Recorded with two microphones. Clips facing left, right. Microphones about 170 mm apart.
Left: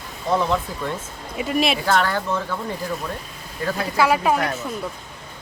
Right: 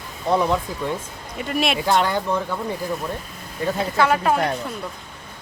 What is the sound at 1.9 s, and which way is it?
Speech, 20° right (ahead or behind).